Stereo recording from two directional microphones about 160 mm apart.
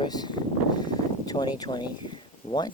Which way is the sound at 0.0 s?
25° left (ahead or behind).